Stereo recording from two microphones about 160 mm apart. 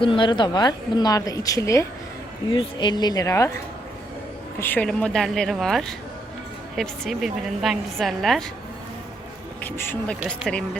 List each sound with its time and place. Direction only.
0.0 s a woman's voice: 30° left (ahead or behind)
2.5 s a woman's voice: 30° left (ahead or behind)
4.6 s a woman's voice: 10° left (ahead or behind)
9.6 s speech: 10° left (ahead or behind)